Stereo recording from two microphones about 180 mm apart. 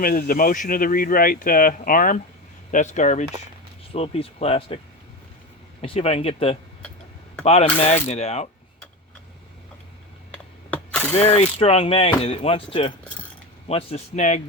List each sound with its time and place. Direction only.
0.0 s speech: 55° left (ahead or behind); by 4.8 s 35° left (ahead or behind)
5.8 s speech: 35° left (ahead or behind)
10.3 s a sound: 5° left (ahead or behind)
11.1 s speech: 35° left (ahead or behind)